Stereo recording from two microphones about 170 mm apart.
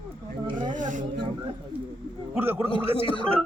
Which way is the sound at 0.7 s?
50° right (ahead or behind).